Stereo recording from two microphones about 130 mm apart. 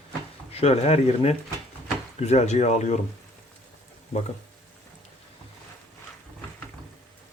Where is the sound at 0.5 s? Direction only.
50° left (ahead or behind).